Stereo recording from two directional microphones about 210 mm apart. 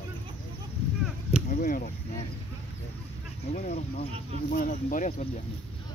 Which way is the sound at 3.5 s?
35° left (ahead or behind).